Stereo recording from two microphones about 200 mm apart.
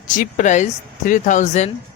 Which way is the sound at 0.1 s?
40° left (ahead or behind).